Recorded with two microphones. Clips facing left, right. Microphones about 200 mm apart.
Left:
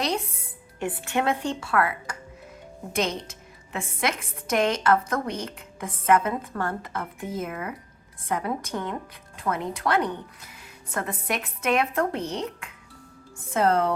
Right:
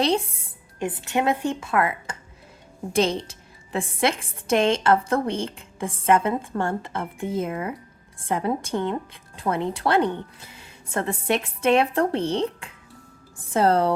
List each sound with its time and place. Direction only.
0.8 s a woman's voice: 20° right (ahead or behind)